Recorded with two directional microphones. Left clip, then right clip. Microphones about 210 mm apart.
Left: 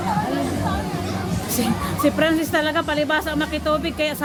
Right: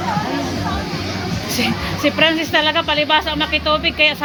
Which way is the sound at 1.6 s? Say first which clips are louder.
Right 3 dB; 25° left (ahead or behind).